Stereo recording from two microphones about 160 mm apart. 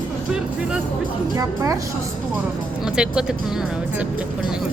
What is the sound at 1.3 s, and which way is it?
Speech, 20° right (ahead or behind).